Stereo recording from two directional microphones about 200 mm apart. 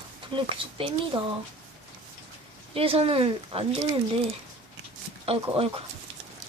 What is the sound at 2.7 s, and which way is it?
Speech, 30° right (ahead or behind).